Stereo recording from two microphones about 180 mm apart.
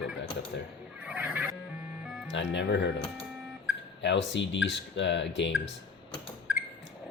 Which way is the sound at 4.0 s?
80° left.